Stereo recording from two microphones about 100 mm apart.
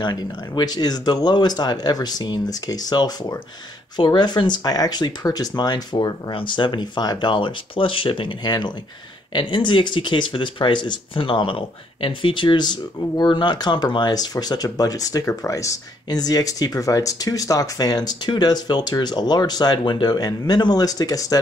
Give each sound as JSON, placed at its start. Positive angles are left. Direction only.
{"t": 0.0, "sound": "speech", "side_deg": 45}